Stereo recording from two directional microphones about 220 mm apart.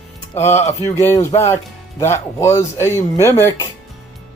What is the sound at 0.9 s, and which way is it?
Speech, 10° left (ahead or behind).